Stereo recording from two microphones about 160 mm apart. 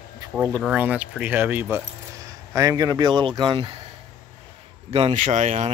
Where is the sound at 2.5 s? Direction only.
25° right (ahead or behind).